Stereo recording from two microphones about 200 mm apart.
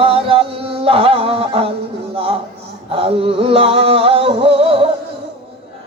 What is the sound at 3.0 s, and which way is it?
Music, 30° right (ahead or behind).